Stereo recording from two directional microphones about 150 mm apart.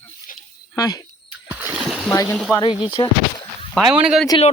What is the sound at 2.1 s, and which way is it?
Speech, 20° left (ahead or behind).